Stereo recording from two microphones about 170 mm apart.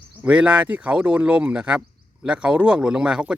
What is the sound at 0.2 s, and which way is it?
A man's voice, 5° right (ahead or behind).